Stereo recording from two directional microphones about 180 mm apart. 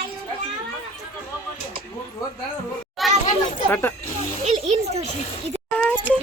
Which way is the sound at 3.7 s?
15° left (ahead or behind).